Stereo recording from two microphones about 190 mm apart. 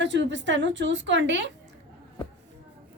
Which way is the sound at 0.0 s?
70° right (ahead or behind).